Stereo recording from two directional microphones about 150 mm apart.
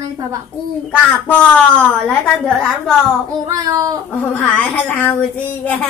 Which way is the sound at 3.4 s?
25° right (ahead or behind).